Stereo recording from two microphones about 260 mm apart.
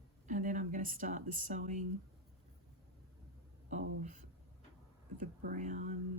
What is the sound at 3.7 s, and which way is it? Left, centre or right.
Speech, right.